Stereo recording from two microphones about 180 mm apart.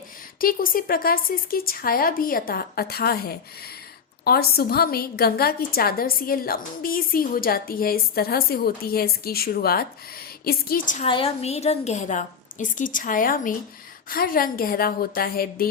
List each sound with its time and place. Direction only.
0.3 s a woman's voice: 50° left (ahead or behind)
11.0 s a woman's voice: 30° left (ahead or behind); by 15.7 s 55° left (ahead or behind)